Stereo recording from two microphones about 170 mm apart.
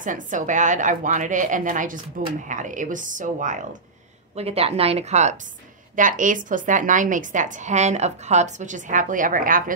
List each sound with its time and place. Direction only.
0.0 s a woman's voice: 50° right (ahead or behind)
4.4 s a woman's voice: 35° right (ahead or behind); by 9.6 s 55° right (ahead or behind)